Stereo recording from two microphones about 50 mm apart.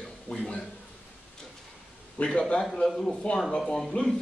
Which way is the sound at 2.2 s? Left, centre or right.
Centre.